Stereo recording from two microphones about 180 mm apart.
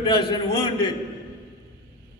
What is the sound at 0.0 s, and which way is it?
Speech, 25° left (ahead or behind).